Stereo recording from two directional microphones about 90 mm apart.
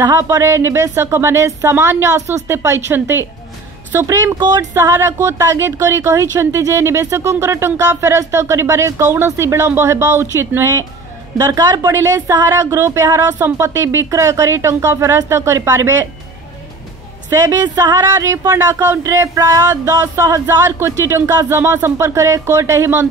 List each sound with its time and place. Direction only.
0.0 s a woman's voice: 30° right (ahead or behind)
17.3 s a woman's voice: 35° right (ahead or behind)